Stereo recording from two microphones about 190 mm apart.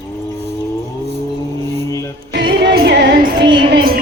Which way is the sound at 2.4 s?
50° right (ahead or behind).